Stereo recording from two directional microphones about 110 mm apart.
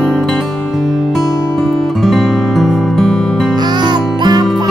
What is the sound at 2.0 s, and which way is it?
Music, centre (ahead or behind).